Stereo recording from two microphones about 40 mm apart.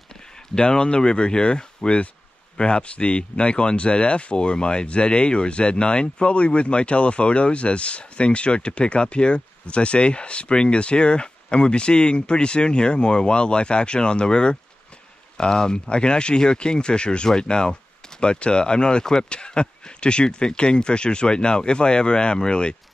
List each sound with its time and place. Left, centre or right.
0.6 s speech: left